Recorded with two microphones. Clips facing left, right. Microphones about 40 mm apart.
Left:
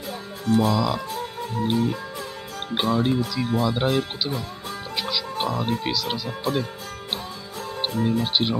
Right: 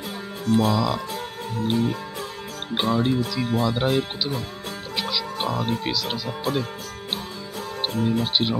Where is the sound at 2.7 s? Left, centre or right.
Centre.